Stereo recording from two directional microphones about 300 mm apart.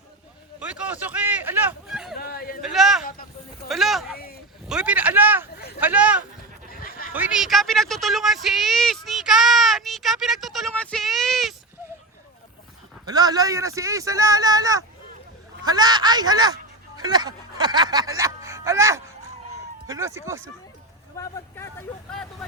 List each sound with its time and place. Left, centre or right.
0.6 s speech: centre
2.1 s a sound: left
2.6 s a man's voice: centre
3.0 s a sound: left
3.7 s speech: centre
5.5 s speech: left
5.8 s speech: centre
6.7 s bleat: left
7.1 s a woman's voice: centre
13.1 s speech: centre
18.2 s music: centre
19.9 s speech: centre
21.2 s speech: centre